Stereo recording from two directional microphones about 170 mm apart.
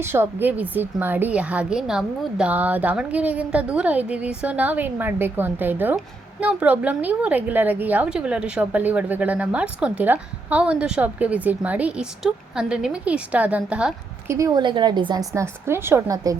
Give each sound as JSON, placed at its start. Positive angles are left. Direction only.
{"t": 0.0, "sound": "a woman's voice", "side_deg": -15}
{"t": 14.3, "sound": "a woman's voice", "side_deg": -20}
{"t": 15.4, "sound": "a woman's voice", "side_deg": -15}